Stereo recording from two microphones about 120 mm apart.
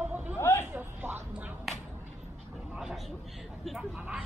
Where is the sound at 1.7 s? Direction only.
Centre (ahead or behind).